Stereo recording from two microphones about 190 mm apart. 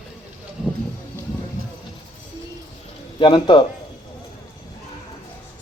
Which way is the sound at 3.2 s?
25° left (ahead or behind).